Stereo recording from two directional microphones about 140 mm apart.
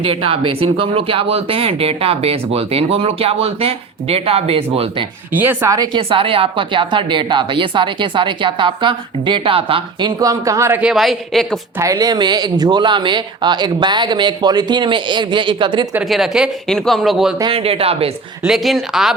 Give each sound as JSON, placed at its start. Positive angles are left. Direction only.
{"t": 0.0, "sound": "speech", "side_deg": -40}
{"t": 5.3, "sound": "speech", "side_deg": -15}
{"t": 10.2, "sound": "speech", "side_deg": -25}
{"t": 10.8, "sound": "speech", "side_deg": -5}
{"t": 11.8, "sound": "speech", "side_deg": -25}
{"t": 16.0, "sound": "speech", "side_deg": 0}
{"t": 17.5, "sound": "speech", "side_deg": -45}
{"t": 18.4, "sound": "speech", "side_deg": 0}